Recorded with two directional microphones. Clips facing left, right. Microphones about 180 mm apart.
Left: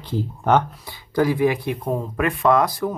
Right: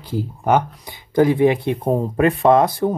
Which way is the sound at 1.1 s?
25° right (ahead or behind).